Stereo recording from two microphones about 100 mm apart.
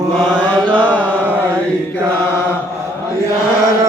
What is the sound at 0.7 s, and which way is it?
Chant, 15° left (ahead or behind).